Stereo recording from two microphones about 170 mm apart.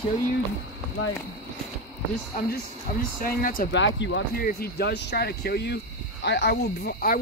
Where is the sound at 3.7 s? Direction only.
90° left.